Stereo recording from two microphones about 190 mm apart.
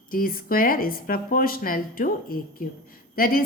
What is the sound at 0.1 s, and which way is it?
A woman's voice, 50° left (ahead or behind).